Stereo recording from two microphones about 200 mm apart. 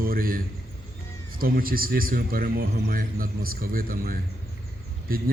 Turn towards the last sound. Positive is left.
turn(degrees=-45)  # may be behind; listen again after turning